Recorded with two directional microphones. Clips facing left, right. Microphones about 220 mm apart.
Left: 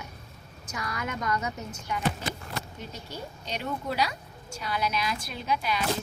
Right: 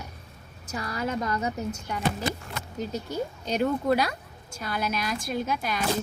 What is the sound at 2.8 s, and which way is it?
A woman's voice, 40° right (ahead or behind).